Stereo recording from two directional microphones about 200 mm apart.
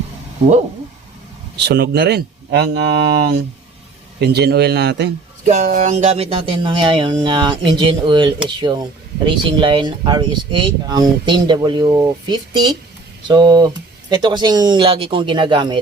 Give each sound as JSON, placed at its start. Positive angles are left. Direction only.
{"t": 1.5, "sound": "speech", "side_deg": -60}
{"t": 4.2, "sound": "speech", "side_deg": -55}
{"t": 5.5, "sound": "speech", "side_deg": -40}